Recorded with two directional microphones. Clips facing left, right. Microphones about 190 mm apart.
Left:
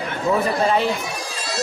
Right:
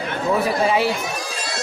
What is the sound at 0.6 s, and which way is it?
Speech, 5° right (ahead or behind).